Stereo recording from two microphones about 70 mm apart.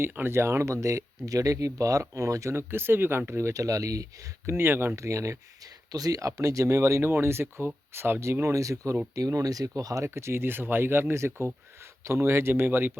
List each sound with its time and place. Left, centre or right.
0.0 s speech: right
4.5 s speech: right
4.9 s speech: right
5.9 s speech: right
10.0 s speech: right